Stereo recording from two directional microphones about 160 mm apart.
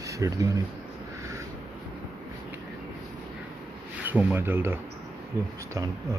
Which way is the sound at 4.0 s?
10° right (ahead or behind).